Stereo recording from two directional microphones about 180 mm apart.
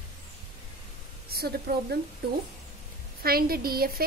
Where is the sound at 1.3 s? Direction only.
60° right (ahead or behind).